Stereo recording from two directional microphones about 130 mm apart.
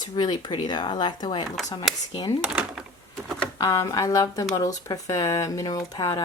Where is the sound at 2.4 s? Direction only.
5° right (ahead or behind).